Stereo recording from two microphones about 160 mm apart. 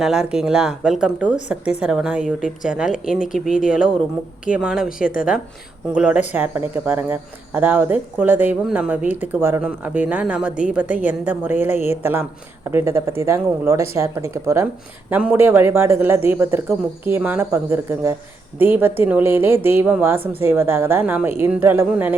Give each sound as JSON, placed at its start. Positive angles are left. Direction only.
{"t": 0.0, "sound": "a woman's voice", "side_deg": -5}